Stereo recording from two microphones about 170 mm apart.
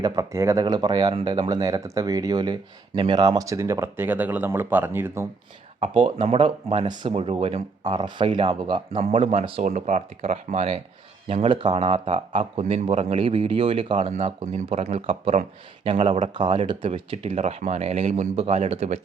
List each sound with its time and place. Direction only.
0.0 s speech: 20° right (ahead or behind)
5.8 s speech: 30° right (ahead or behind)